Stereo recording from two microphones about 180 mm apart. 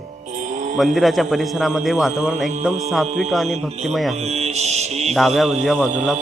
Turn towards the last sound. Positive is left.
turn(degrees=0)  # may be behind; listen again after turning